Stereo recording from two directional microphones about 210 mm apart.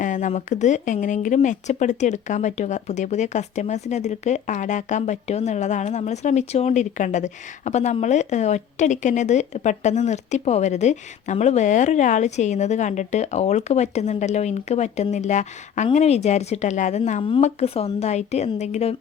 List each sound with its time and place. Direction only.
0.0 s speech: 35° left (ahead or behind)